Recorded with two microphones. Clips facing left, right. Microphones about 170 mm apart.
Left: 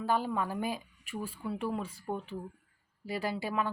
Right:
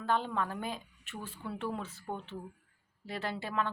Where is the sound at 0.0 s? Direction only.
5° left (ahead or behind).